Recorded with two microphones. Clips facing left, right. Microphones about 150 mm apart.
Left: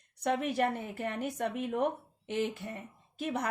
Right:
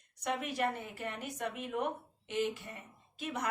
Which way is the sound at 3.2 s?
55° left (ahead or behind).